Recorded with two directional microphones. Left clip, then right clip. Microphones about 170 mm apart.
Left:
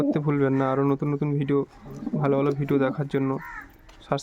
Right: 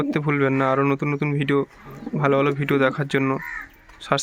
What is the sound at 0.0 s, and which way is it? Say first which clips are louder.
Speech: right 2 dB; 10° left (ahead or behind).